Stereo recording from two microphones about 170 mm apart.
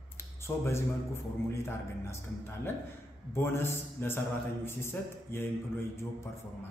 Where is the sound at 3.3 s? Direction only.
15° left (ahead or behind).